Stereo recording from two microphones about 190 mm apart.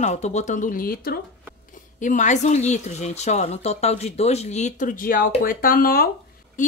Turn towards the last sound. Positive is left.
turn(degrees=50)  # may be behind; listen again after turning